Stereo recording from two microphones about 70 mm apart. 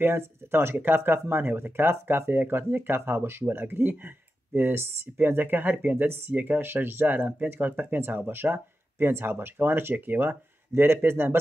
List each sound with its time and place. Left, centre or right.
0.0 s speech: right